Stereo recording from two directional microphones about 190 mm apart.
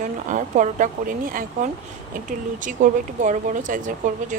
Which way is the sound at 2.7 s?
40° right (ahead or behind).